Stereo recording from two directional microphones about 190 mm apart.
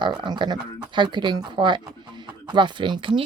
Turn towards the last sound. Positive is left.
turn(degrees=-25)  # may be behind; listen again after turning